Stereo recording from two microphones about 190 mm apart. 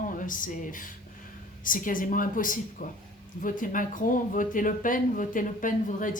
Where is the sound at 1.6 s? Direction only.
45° left (ahead or behind).